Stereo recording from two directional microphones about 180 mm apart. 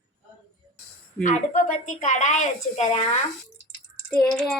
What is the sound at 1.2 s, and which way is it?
A woman's voice, 45° left (ahead or behind).